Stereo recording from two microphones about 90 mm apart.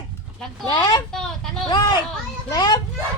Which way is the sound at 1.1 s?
5° left (ahead or behind).